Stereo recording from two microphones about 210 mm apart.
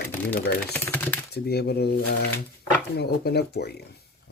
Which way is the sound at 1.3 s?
50° left (ahead or behind).